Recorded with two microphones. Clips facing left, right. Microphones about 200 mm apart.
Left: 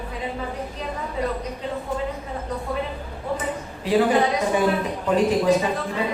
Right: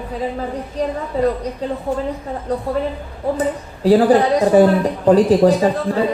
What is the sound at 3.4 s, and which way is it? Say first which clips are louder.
A man's voice: right 9 dB; 35° right (ahead or behind).